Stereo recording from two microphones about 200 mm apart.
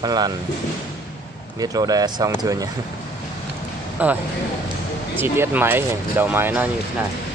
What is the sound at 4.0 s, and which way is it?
Speech, 10° right (ahead or behind).